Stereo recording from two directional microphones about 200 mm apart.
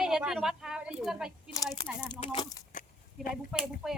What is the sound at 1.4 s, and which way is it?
Speech, 15° left (ahead or behind).